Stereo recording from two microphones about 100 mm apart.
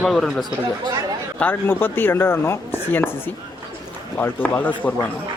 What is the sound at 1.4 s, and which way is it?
Speech, 20° left (ahead or behind).